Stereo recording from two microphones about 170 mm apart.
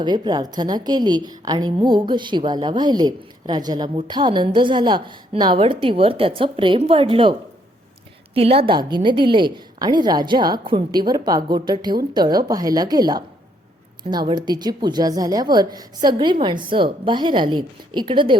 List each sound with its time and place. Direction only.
0.0 s a woman's voice: 25° right (ahead or behind)
8.4 s a woman's voice: 35° right (ahead or behind)